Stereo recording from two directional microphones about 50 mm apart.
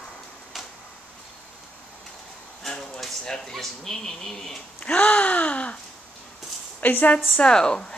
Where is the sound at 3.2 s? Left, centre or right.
Centre.